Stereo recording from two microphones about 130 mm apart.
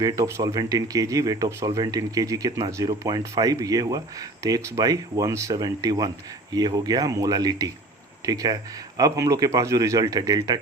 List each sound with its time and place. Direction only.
0.0 s speech: 30° right (ahead or behind)